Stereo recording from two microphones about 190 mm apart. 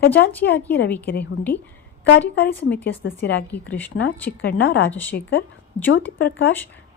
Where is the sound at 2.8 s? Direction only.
60° left (ahead or behind).